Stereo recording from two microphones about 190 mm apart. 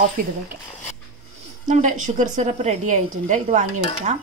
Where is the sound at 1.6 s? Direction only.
40° right (ahead or behind).